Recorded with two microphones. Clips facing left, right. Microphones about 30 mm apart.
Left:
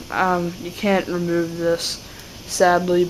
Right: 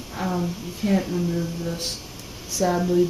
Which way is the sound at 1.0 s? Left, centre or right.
Left.